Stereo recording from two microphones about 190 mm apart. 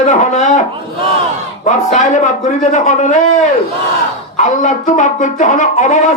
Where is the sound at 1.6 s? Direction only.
40° left (ahead or behind).